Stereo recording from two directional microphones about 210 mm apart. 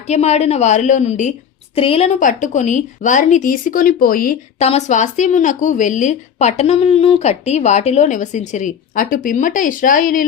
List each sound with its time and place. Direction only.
0.1 s a woman's voice: 30° left (ahead or behind)
4.6 s a woman's voice: 30° left (ahead or behind)